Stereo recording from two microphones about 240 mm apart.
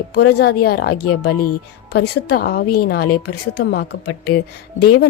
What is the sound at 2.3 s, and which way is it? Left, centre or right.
Speech, left.